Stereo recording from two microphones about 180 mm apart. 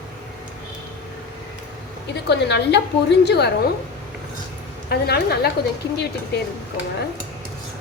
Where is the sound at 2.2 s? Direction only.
70° left (ahead or behind).